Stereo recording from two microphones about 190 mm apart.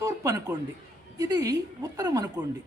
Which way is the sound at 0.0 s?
15° right (ahead or behind).